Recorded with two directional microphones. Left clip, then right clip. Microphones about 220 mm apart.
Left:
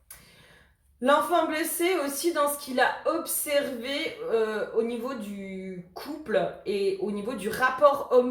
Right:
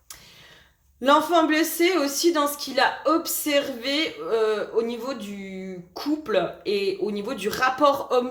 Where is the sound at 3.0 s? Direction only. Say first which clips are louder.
Right 5 dB; 45° right (ahead or behind).